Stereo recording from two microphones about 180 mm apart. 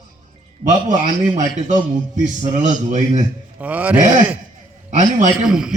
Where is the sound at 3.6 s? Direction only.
10° right (ahead or behind).